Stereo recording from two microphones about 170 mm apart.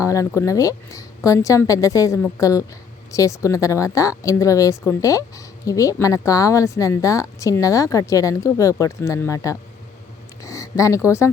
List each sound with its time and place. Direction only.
0.0 s speech: 20° left (ahead or behind)